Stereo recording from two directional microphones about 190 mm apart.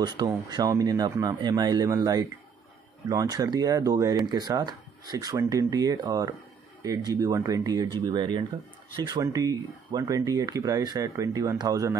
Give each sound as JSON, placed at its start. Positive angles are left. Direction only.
{"t": 0.0, "sound": "speech", "side_deg": -20}